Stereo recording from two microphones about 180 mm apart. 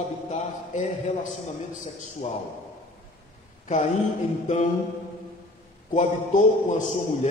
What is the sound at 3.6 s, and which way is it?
Speech, 40° left (ahead or behind).